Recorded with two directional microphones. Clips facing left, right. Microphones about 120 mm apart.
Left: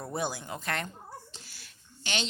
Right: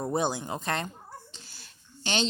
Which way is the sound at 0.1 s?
25° right (ahead or behind).